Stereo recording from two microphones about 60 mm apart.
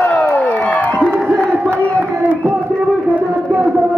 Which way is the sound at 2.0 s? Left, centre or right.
Right.